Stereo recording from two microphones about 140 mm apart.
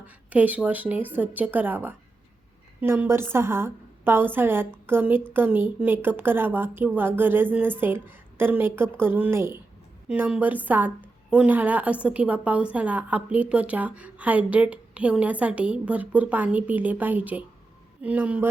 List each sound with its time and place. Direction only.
0.0 s a woman's voice: 10° right (ahead or behind)